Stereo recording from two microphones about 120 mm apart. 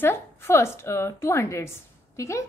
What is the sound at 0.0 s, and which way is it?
A woman's voice, 20° left (ahead or behind).